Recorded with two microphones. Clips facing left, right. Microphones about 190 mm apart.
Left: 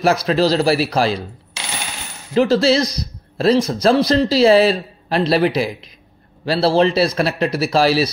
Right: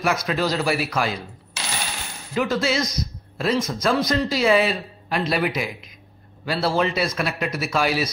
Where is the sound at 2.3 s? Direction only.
35° left (ahead or behind).